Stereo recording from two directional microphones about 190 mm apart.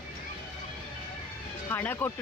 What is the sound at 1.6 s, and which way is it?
Speech, 10° left (ahead or behind).